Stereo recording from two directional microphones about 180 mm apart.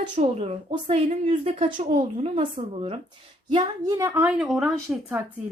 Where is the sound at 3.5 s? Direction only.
20° right (ahead or behind).